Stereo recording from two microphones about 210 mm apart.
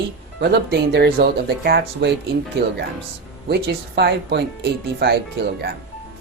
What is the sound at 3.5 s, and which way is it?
Speech, 50° right (ahead or behind).